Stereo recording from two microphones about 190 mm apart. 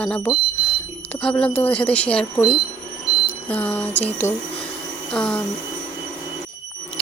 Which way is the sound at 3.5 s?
5° left (ahead or behind).